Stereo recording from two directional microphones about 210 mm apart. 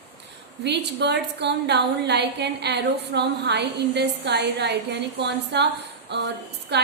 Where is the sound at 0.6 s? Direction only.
55° right (ahead or behind).